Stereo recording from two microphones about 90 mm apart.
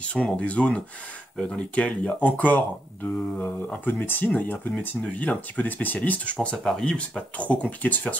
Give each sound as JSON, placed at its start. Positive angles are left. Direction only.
{"t": 0.0, "sound": "speech", "side_deg": 10}